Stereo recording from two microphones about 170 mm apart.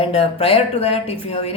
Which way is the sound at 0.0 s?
35° left (ahead or behind).